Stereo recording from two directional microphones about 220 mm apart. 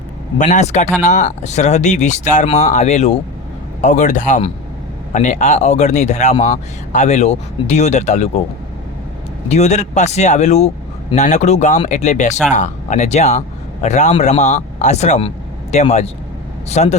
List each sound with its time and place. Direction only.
0.3 s speech: 35° left (ahead or behind)
9.5 s speech: 30° left (ahead or behind)